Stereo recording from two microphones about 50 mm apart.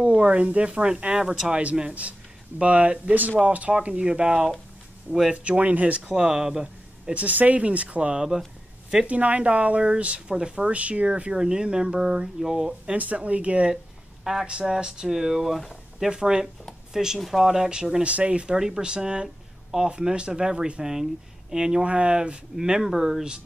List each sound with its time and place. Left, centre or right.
0.0 s speech: right
7.2 s speech: right; by 12.9 s centre
12.9 s speech: right; by 17.8 s centre
18.0 s speech: right
19.2 s a sound: centre
19.9 s speech: centre